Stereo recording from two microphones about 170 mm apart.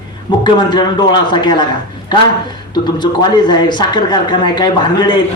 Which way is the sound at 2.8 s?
25° left (ahead or behind).